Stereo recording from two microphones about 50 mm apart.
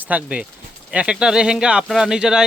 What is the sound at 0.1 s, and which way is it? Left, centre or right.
Speech, right.